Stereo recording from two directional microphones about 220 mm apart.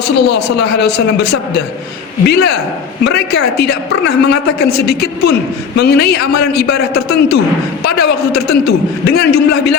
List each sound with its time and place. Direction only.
0.3 s a woman's voice: 50° left (ahead or behind)